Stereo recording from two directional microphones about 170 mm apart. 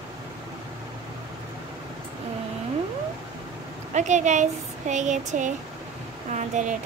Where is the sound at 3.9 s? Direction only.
45° right (ahead or behind).